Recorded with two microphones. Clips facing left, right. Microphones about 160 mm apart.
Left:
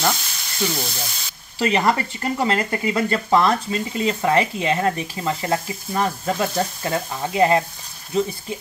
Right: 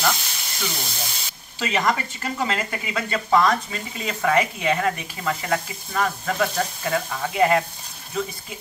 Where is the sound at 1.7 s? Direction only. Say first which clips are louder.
Left 3 dB; 35° left (ahead or behind).